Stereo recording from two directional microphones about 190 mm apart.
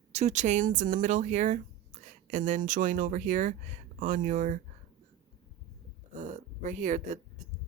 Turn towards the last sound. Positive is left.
turn(degrees=-40)  # may be behind; listen again after turning